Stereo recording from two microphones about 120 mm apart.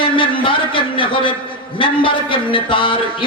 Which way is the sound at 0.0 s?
45° left (ahead or behind).